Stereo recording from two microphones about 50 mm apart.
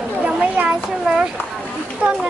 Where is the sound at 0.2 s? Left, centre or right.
Right.